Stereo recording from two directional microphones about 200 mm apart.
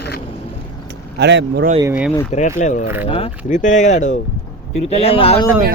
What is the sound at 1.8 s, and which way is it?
Speech, 10° right (ahead or behind).